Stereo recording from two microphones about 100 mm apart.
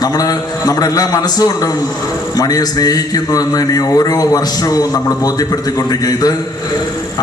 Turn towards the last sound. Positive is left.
turn(degrees=40)  # may be behind; listen again after turning